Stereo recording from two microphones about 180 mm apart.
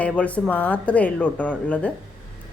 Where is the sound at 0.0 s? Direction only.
5° left (ahead or behind).